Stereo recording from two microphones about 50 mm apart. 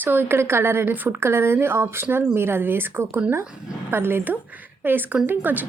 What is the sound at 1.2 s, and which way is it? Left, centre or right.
A woman's voice, right.